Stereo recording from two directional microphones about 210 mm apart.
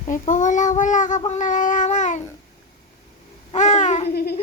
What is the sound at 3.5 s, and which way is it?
Babbling, 35° left (ahead or behind).